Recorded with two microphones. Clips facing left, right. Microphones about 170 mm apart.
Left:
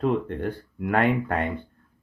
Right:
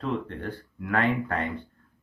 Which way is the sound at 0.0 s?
50° left (ahead or behind).